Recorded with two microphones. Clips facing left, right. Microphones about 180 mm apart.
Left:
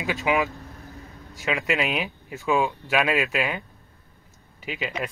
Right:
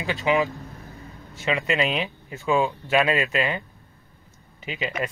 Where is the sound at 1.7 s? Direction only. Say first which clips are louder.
Even; 5° left (ahead or behind).